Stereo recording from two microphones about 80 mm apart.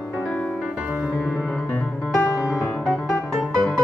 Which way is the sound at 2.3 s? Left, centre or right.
Left.